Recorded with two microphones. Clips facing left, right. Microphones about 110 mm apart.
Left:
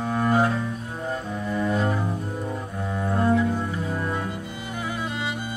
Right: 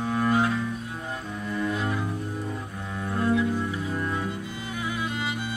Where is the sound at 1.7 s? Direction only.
35° left (ahead or behind).